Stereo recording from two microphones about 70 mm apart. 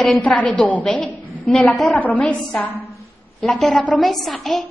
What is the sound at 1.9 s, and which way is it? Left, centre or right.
Speech, left.